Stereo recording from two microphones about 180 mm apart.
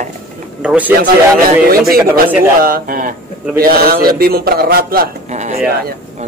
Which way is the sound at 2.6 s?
55° right (ahead or behind).